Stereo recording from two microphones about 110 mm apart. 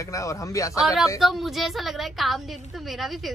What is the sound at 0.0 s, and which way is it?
Speech, 30° left (ahead or behind).